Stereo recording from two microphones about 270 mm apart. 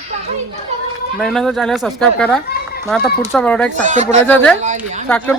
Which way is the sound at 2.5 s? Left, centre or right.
Left.